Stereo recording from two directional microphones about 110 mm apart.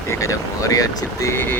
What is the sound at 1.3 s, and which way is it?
Speech, 20° left (ahead or behind).